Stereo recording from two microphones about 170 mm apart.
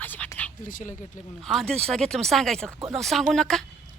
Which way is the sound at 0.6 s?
50° left (ahead or behind).